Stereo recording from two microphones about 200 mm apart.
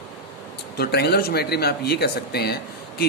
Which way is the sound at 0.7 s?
55° left (ahead or behind).